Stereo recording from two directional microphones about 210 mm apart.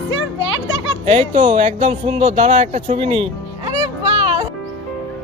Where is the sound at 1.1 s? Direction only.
30° right (ahead or behind).